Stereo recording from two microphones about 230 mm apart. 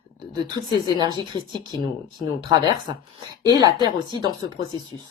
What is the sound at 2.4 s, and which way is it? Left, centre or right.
Speech, centre.